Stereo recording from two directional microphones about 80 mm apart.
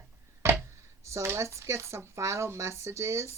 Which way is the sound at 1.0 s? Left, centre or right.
Right.